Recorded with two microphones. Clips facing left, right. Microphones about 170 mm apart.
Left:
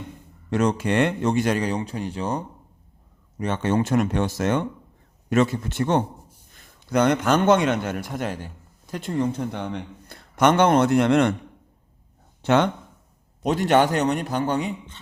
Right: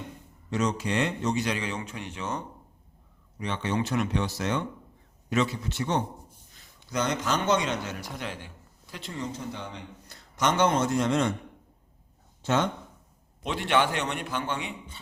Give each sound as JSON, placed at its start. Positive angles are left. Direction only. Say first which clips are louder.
{"t": 0.5, "sound": "speech", "louder": "left 6 dB", "side_deg": 55}
{"t": 3.3, "sound": "a man's voice", "louder": "left 7 dB", "side_deg": 50}
{"t": 12.4, "sound": "speech", "louder": "left 7 dB", "side_deg": 65}
{"t": 13.4, "sound": "a man's voice", "louder": "left 7 dB", "side_deg": 40}